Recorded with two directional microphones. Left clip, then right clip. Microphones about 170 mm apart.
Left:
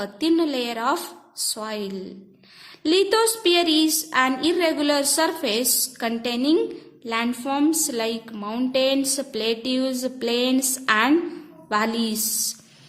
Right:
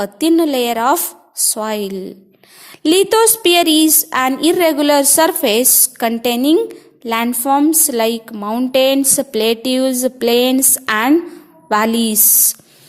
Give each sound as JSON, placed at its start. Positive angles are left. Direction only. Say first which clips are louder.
{"t": 0.0, "sound": "speech", "louder": "right 8 dB", "side_deg": -40}